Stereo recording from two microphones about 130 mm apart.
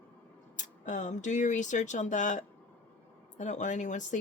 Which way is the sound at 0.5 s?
70° left (ahead or behind).